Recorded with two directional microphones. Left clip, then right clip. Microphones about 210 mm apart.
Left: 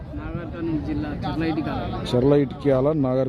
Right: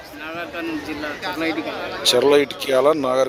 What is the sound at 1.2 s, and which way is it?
Speech, 45° left (ahead or behind).